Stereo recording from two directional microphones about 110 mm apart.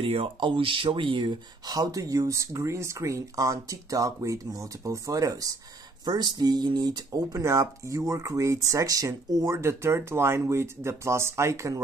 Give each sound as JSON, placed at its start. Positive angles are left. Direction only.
{"t": 0.0, "sound": "speech", "side_deg": -55}